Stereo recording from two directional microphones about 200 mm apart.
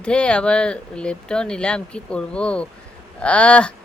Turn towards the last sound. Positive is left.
turn(degrees=5)  # may be behind; listen again after turning